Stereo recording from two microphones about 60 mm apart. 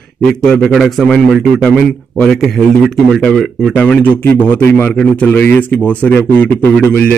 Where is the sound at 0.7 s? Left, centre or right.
Centre.